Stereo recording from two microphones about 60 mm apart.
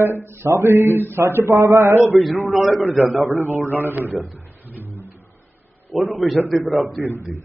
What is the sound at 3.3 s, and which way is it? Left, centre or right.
Speech, right.